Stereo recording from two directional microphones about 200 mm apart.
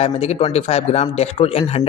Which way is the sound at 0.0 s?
30° left (ahead or behind).